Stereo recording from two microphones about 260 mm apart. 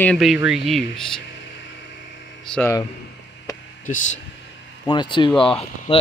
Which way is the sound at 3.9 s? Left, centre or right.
Left.